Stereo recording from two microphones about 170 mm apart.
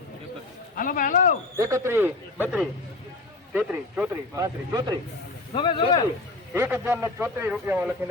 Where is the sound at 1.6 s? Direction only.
15° right (ahead or behind).